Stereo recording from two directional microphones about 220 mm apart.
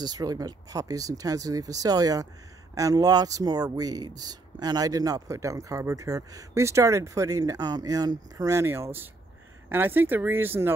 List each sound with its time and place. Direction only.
0.0 s speech: 15° right (ahead or behind)